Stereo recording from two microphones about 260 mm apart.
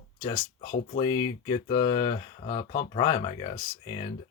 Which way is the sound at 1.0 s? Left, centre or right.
Centre.